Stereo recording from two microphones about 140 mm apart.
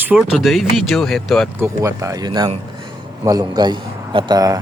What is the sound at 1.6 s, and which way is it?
A man's voice, 20° right (ahead or behind).